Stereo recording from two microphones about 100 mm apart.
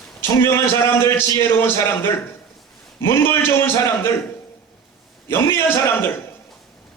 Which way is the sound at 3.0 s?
25° left (ahead or behind).